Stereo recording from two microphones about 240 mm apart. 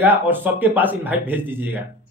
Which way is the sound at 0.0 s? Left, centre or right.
Centre.